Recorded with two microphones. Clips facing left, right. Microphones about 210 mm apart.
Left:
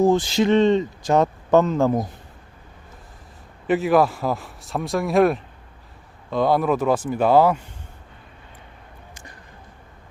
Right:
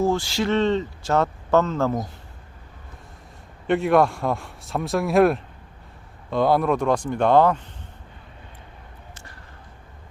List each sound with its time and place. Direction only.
0.0 s speech: 20° left (ahead or behind)
3.7 s speech: centre (ahead or behind)